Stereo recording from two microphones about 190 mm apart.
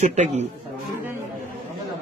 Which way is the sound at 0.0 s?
35° right (ahead or behind).